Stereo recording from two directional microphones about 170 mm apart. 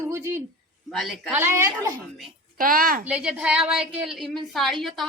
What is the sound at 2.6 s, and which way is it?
Speech, 55° right (ahead or behind).